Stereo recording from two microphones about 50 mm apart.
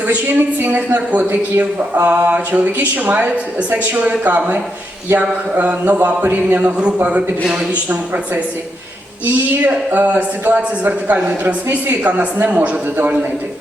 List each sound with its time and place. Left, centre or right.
0.1 s a man's voice: right
9.2 s a man's voice: right